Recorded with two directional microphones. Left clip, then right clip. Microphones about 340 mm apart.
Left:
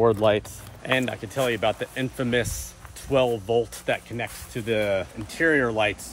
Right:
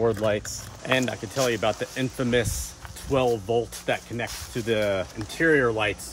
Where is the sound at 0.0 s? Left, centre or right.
Centre.